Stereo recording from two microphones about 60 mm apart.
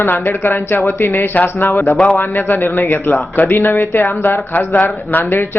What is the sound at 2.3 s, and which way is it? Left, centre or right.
Speech, left.